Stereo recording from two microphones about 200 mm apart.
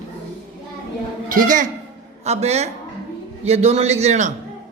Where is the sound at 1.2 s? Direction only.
40° right (ahead or behind).